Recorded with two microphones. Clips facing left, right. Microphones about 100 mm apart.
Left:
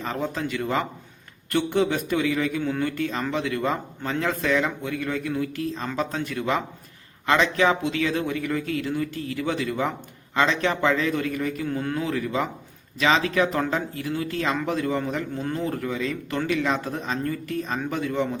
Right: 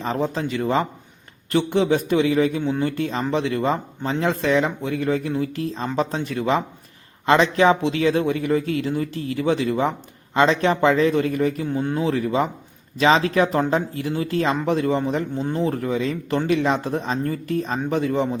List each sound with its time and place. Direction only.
0.0 s speech: 30° right (ahead or behind)
2.6 s speech: 20° right (ahead or behind)
2.8 s speech: 35° right (ahead or behind)
11.7 s speech: 25° right (ahead or behind)